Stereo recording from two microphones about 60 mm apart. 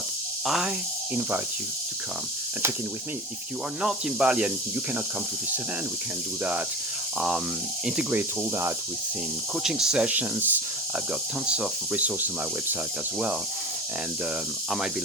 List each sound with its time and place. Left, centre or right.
0.4 s speech: centre
3.8 s speech: centre
9.6 s speech: centre
10.1 s speech: right
11.4 s speech: centre